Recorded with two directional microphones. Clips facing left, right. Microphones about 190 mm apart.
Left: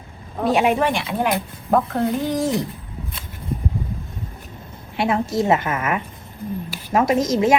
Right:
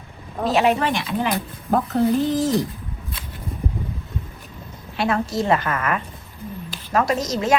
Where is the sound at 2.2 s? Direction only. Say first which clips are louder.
Right 1 dB; 55° left (ahead or behind).